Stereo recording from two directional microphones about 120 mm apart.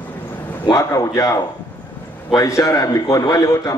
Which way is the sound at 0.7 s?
30° left (ahead or behind).